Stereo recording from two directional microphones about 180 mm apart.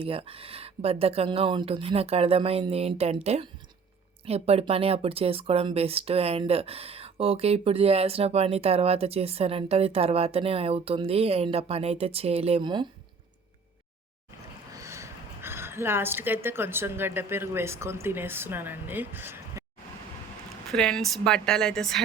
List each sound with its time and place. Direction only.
0.0 s speech: 30° right (ahead or behind)
14.7 s a woman's voice: 15° right (ahead or behind)
20.7 s speech: 5° left (ahead or behind)